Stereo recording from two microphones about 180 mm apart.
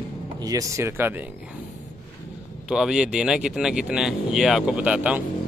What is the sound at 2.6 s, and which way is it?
Speech, 5° right (ahead or behind).